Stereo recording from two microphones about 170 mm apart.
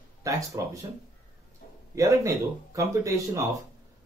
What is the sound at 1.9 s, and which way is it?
Speech, 20° right (ahead or behind).